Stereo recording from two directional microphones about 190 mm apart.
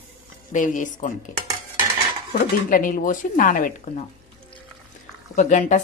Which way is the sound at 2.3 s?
50° left (ahead or behind).